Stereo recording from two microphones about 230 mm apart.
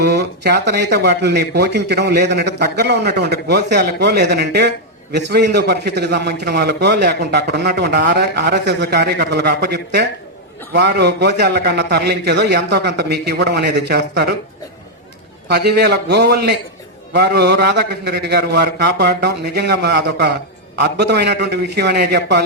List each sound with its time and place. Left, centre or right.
0.0 s speech: right
15.4 s speech: right